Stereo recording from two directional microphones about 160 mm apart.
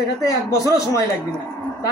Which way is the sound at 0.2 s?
20° left (ahead or behind).